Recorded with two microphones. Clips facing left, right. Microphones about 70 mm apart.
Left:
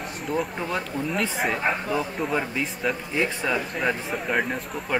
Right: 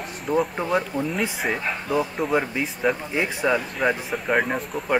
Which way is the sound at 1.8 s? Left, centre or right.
Centre.